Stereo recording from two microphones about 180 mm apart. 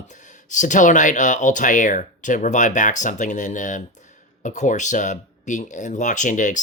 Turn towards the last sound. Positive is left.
turn(degrees=45)  # may be behind; listen again after turning